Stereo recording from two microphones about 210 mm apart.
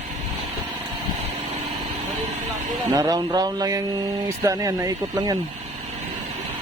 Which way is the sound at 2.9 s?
15° right (ahead or behind).